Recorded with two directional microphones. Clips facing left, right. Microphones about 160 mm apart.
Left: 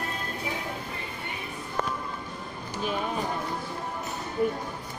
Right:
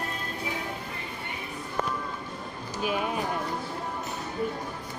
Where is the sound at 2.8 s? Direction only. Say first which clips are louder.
Right 1 dB; 10° right (ahead or behind).